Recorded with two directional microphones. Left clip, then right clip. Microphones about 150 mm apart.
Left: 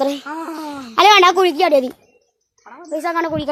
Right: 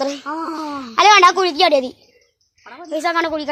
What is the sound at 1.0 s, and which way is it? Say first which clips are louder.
Speech: even; 65° left (ahead or behind).